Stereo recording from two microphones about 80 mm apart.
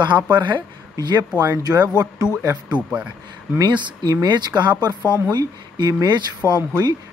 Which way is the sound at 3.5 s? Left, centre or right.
Right.